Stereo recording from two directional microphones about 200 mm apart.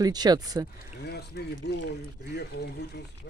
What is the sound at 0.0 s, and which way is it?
Speech, 20° right (ahead or behind).